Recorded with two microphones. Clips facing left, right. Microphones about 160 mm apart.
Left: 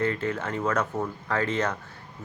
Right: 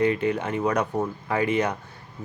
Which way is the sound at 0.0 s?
15° right (ahead or behind).